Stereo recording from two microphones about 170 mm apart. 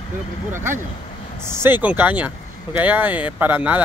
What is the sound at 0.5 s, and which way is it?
Speech, 15° right (ahead or behind).